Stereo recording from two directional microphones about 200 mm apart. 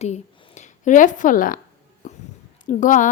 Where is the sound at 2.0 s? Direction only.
40° left (ahead or behind).